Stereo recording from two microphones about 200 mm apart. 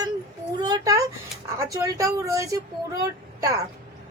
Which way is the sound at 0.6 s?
20° right (ahead or behind).